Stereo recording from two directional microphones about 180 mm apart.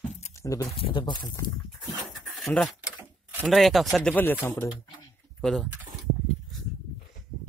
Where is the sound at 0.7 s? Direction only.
30° left (ahead or behind).